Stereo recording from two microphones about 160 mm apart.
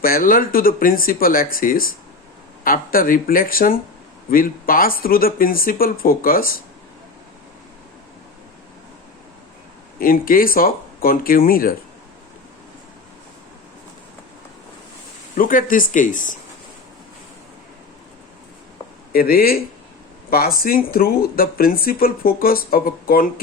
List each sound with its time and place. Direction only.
0.0 s speech: 60° left (ahead or behind)
10.0 s speech: 65° left (ahead or behind)
15.4 s speech: 60° left (ahead or behind)
19.1 s speech: 65° left (ahead or behind)